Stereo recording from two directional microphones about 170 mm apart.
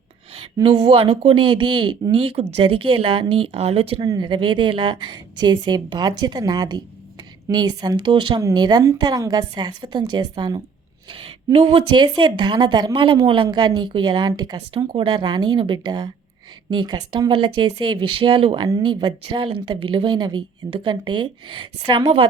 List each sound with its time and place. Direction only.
0.3 s speech: 35° right (ahead or behind)
4.0 s speech: 25° right (ahead or behind)
11.5 s speech: 35° right (ahead or behind)